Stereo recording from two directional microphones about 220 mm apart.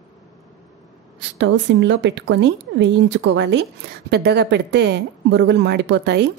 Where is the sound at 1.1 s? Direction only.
55° right (ahead or behind).